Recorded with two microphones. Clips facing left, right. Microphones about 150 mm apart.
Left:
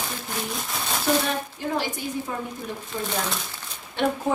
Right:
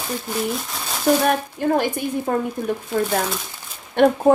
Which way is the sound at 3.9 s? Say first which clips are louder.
Right 9 dB; 55° right (ahead or behind).